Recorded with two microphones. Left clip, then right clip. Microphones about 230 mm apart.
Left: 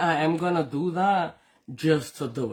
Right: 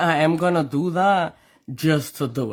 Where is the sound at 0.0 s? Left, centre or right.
Right.